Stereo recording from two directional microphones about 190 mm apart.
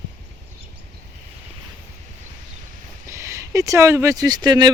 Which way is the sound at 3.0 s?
15° right (ahead or behind).